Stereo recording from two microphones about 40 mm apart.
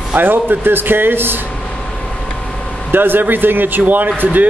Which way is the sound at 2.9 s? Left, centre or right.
Right.